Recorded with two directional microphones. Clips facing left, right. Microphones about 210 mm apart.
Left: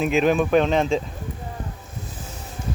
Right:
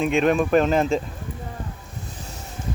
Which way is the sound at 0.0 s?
Centre (ahead or behind).